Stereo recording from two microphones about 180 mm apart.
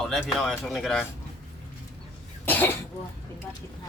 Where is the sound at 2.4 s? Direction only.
10° left (ahead or behind).